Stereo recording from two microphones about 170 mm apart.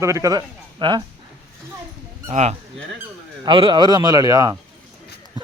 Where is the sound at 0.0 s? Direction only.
20° right (ahead or behind).